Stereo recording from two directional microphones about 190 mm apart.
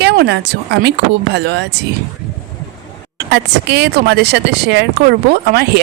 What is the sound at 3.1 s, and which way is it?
Speech, 65° right (ahead or behind).